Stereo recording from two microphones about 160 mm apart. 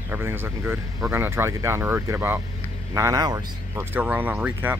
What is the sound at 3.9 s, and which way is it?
Speech, 10° right (ahead or behind).